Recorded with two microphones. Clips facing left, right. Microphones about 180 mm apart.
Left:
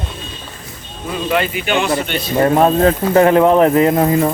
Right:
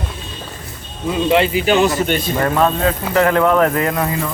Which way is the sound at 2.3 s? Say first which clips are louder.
Left 7 dB; 25° left (ahead or behind).